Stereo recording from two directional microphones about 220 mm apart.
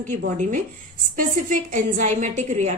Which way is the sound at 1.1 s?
35° right (ahead or behind).